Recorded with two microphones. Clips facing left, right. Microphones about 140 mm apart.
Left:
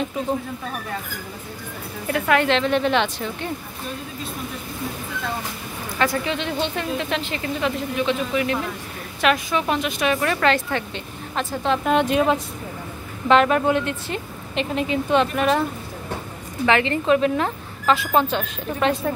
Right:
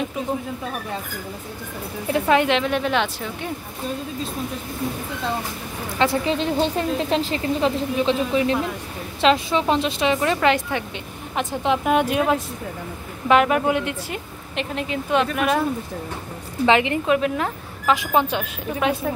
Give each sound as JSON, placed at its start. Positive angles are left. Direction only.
{"t": 2.1, "sound": "a woman's voice", "side_deg": -20}
{"t": 5.9, "sound": "a woman's voice", "side_deg": -30}
{"t": 16.6, "sound": "a woman's voice", "side_deg": -15}